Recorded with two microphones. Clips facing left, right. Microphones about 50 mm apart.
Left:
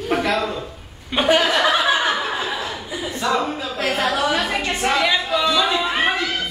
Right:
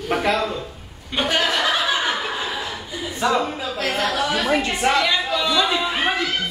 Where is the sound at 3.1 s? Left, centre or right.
Centre.